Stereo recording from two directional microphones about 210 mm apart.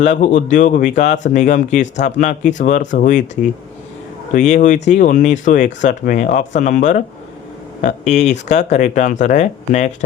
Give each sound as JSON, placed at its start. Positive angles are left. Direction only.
{"t": 0.0, "sound": "speech", "side_deg": 35}
{"t": 4.4, "sound": "speech", "side_deg": 35}